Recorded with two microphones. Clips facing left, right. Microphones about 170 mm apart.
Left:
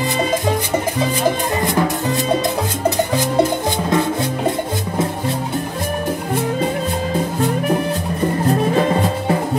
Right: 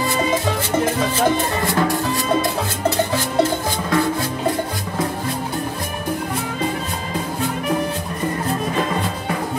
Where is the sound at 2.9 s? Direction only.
15° left (ahead or behind).